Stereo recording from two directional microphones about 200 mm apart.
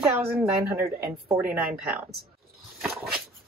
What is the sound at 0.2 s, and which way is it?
A woman's voice, 10° right (ahead or behind).